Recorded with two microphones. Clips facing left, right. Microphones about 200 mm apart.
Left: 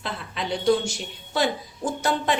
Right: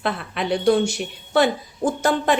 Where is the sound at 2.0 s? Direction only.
50° right (ahead or behind).